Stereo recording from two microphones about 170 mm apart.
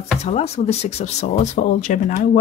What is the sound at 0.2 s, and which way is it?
Speech, 40° left (ahead or behind).